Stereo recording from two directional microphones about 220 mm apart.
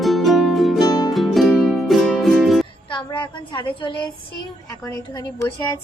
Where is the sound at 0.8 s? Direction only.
15° left (ahead or behind).